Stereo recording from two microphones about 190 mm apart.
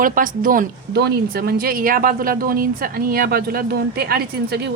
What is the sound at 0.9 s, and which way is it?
Speech, 55° right (ahead or behind).